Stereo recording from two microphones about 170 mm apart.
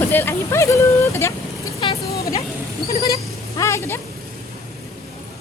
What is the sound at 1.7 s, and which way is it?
Vehicle, 35° left (ahead or behind).